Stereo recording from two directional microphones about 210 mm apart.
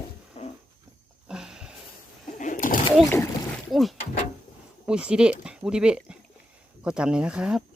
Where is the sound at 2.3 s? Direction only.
35° left (ahead or behind).